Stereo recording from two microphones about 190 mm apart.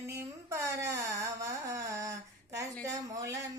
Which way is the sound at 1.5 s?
15° right (ahead or behind).